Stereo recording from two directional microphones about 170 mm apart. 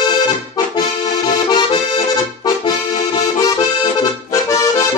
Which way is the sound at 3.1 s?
20° left (ahead or behind).